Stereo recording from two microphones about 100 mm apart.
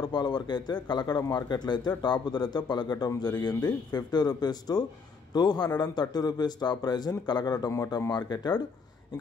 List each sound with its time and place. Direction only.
0.0 s speech: 45° left (ahead or behind)